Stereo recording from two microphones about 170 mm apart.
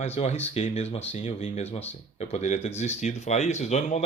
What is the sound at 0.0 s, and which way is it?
Speech, 40° left (ahead or behind).